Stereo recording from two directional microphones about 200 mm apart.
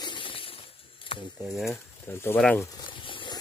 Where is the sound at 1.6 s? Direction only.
10° left (ahead or behind).